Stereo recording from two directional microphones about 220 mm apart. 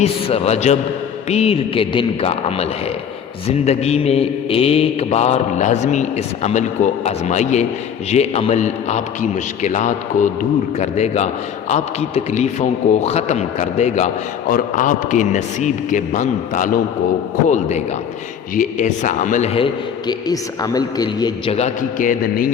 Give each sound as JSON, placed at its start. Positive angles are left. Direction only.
{"t": 0.0, "sound": "mantra", "side_deg": 30}
{"t": 8.1, "sound": "a man's voice", "side_deg": 30}